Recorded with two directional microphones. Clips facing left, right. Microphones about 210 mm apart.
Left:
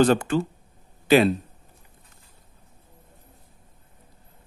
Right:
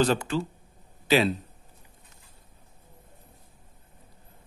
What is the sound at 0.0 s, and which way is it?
Speech, 55° left (ahead or behind).